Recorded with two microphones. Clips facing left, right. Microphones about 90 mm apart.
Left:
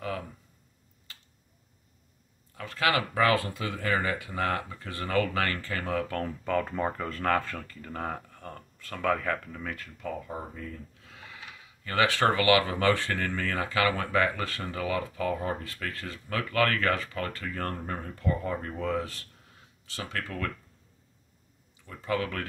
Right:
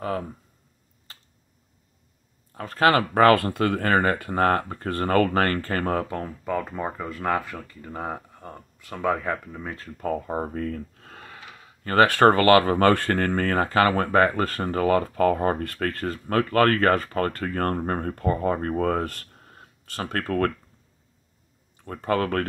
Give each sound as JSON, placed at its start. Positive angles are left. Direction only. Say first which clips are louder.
{"t": 1.1, "sound": "tick-tock", "louder": "right 3 dB", "side_deg": -35}
{"t": 2.5, "sound": "speech", "louder": "right 7 dB", "side_deg": -40}
{"t": 6.0, "sound": "speech", "louder": "right 2 dB", "side_deg": -15}
{"t": 9.9, "sound": "speech", "louder": "right 12 dB", "side_deg": -45}
{"t": 21.7, "sound": "speech", "louder": "right 6 dB", "side_deg": -50}